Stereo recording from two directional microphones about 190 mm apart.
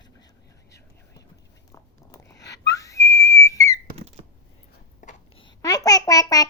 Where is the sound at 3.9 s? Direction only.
35° right (ahead or behind).